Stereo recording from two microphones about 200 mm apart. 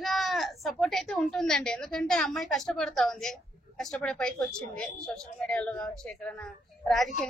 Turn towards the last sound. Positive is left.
turn(degrees=0)  # may be behind; listen again after turning